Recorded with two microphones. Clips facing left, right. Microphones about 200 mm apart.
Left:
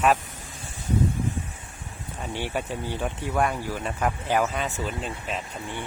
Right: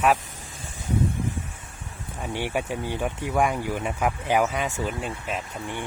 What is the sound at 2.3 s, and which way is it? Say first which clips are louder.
Speech: right 2 dB; 15° right (ahead or behind).